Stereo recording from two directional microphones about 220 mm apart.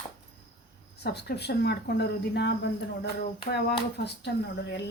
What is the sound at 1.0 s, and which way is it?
Speech, 50° left (ahead or behind).